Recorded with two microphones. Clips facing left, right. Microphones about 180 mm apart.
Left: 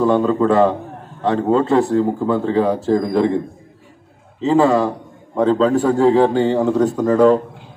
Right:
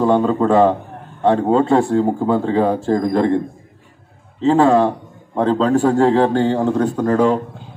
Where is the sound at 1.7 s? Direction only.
30° right (ahead or behind).